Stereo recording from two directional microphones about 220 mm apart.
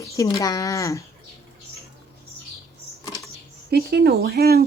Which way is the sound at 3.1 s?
15° left (ahead or behind).